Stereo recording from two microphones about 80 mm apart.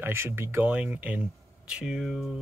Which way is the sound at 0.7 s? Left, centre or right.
Centre.